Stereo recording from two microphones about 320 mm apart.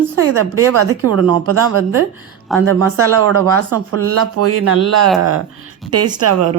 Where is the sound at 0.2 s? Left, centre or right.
Right.